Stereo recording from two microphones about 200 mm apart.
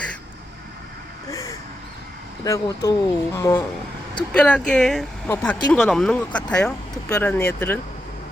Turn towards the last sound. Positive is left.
turn(degrees=10)  # may be behind; listen again after turning